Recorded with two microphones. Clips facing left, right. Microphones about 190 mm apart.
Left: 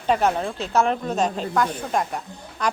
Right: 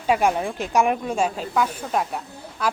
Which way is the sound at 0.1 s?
10° right (ahead or behind).